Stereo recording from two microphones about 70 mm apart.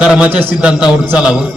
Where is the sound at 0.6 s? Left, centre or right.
Centre.